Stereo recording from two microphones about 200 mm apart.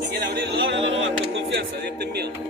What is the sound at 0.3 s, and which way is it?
Music, 55° right (ahead or behind).